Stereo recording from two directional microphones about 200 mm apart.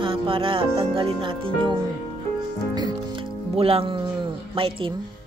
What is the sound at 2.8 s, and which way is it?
Music, 25° right (ahead or behind).